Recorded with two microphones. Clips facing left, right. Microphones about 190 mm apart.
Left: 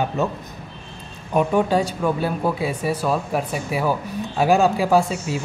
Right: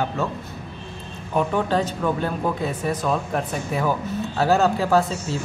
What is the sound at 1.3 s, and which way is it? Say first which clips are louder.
Speech: left 3 dB; 15° left (ahead or behind).